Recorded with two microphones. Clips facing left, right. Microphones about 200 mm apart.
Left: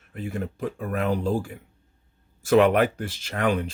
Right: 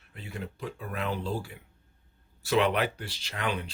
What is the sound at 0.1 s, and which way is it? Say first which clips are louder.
Speech: left 9 dB; 50° left (ahead or behind).